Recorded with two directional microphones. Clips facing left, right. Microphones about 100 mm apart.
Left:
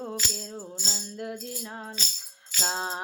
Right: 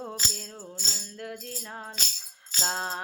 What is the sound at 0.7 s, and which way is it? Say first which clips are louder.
Music: left 4 dB; 20° left (ahead or behind).